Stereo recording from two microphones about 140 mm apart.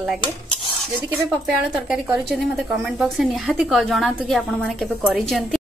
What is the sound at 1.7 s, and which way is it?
A woman's voice, 5° right (ahead or behind).